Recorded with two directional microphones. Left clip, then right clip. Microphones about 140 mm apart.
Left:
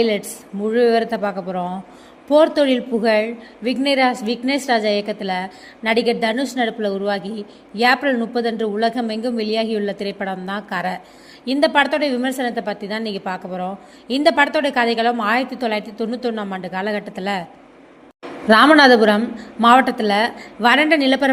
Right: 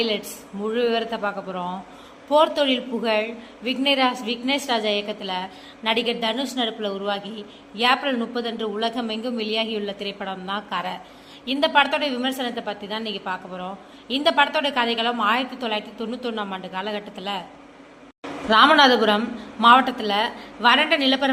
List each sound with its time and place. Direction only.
0.7 s a woman's voice: 40° left (ahead or behind)
18.4 s a woman's voice: 55° left (ahead or behind)
18.7 s a woman's voice: 45° left (ahead or behind)